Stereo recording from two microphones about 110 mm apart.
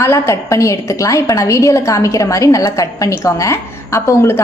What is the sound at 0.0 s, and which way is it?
A woman's voice, 25° left (ahead or behind).